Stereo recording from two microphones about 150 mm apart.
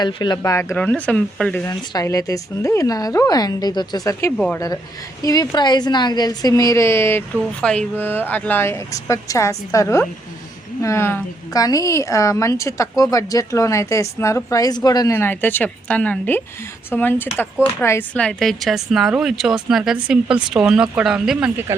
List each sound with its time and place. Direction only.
0.0 s a woman's voice: 30° left (ahead or behind)
0.8 s speech: 10° left (ahead or behind)
1.6 s a woman's voice: 25° left (ahead or behind)
4.4 s speech: 10° left (ahead or behind)
5.2 s a woman's voice: 25° left (ahead or behind); by 21.5 s 5° right (ahead or behind)